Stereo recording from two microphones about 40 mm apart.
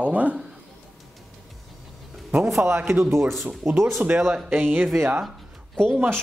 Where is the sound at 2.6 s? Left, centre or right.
Right.